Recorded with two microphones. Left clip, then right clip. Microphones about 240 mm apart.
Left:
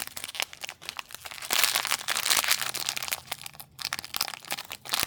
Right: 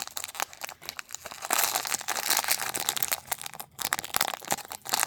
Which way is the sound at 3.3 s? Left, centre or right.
Centre.